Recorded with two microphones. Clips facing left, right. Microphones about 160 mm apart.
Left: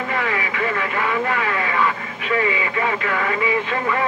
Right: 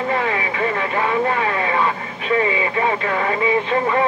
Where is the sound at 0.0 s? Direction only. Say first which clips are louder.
Right 3 dB; 30° right (ahead or behind).